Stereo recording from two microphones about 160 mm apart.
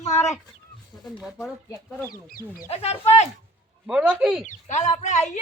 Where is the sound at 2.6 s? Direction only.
40° left (ahead or behind).